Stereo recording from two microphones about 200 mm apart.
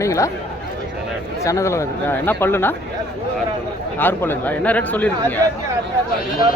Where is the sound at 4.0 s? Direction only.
10° left (ahead or behind).